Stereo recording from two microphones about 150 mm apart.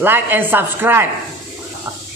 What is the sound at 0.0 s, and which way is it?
A man's voice, 15° right (ahead or behind).